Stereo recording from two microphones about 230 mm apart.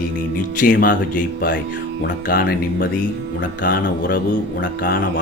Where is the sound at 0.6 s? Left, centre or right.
Left.